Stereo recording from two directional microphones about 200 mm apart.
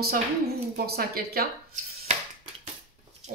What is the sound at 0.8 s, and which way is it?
Speech, 50° right (ahead or behind).